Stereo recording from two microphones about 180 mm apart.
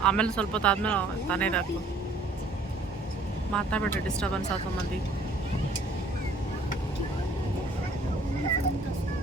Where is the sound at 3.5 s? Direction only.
5° left (ahead or behind).